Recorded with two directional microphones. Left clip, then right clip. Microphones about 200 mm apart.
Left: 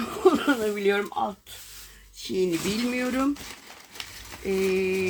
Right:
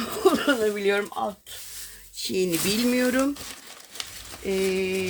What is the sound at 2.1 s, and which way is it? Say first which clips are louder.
Speech: right 1 dB; 50° right (ahead or behind).